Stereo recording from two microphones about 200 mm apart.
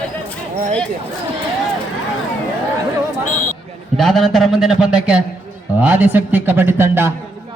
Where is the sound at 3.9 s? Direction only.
Centre (ahead or behind).